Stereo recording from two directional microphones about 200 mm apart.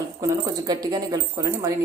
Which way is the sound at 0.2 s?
20° right (ahead or behind).